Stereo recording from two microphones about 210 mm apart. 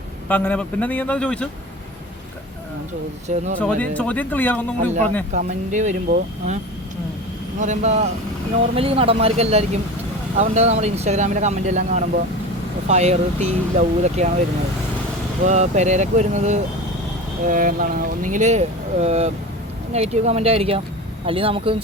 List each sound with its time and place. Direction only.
0.3 s a man's voice: 10° left (ahead or behind)
3.6 s a man's voice: 5° left (ahead or behind)
4.8 s speech: 35° right (ahead or behind)
7.6 s speech: 35° right (ahead or behind)
15.4 s speech: 35° right (ahead or behind)